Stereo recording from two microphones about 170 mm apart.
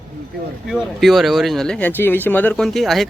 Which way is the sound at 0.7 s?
Centre (ahead or behind).